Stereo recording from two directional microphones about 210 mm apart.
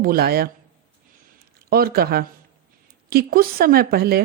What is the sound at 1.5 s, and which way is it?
Speech, 45° right (ahead or behind).